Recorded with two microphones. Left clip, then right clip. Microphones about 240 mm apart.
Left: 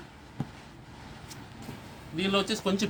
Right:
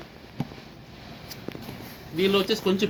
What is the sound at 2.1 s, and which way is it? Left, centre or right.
Speech, left.